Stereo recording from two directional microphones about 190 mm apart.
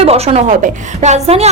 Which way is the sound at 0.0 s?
35° right (ahead or behind).